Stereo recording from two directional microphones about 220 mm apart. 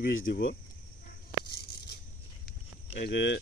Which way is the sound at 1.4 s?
45° left (ahead or behind).